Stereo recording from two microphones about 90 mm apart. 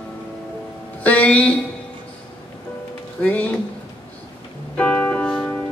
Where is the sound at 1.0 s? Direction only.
15° left (ahead or behind).